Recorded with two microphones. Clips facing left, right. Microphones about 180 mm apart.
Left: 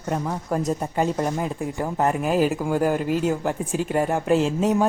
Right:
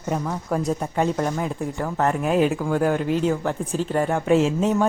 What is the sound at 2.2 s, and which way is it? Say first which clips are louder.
Speech: right 1 dB; centre (ahead or behind).